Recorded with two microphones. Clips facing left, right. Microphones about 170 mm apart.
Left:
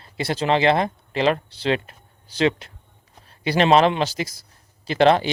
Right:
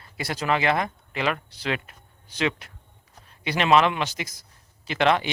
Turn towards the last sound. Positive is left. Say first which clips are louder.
# left 5 dB
turn(degrees=35)  # may be behind; listen again after turning